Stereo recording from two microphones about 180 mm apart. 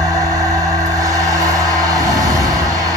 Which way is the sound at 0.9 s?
20° right (ahead or behind).